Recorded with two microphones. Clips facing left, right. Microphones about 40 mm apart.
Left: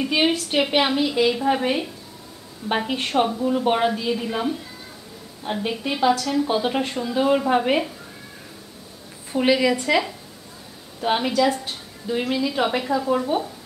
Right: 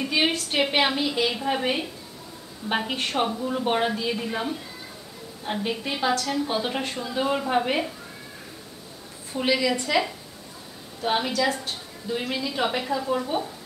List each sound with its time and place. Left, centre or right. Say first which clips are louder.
0.1 s a woman's voice: left 3 dB; centre
9.3 s a woman's voice: left 5 dB; left
11.1 s a woman's voice: left 4 dB; centre